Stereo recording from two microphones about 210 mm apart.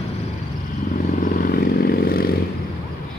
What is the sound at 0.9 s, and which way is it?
Vehicle, 40° left (ahead or behind).